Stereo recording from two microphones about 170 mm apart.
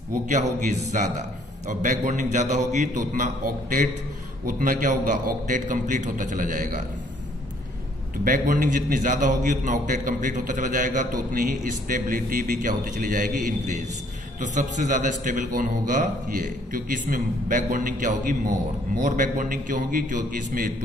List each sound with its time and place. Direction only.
0.3 s a man's voice: 45° right (ahead or behind)
8.2 s a man's voice: 55° right (ahead or behind)